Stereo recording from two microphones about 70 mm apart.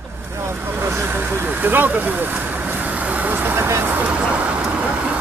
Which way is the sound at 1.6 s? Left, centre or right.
Right.